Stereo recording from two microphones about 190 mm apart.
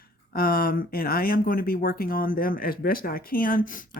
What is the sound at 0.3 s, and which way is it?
Speech, 50° left (ahead or behind).